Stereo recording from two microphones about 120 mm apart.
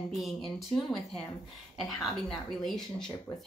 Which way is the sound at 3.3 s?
25° left (ahead or behind).